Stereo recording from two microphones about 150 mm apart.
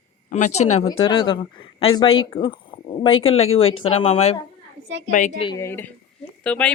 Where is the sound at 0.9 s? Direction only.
35° left (ahead or behind).